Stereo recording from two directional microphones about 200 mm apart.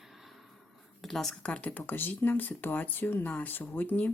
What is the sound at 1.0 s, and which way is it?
Speech, centre (ahead or behind).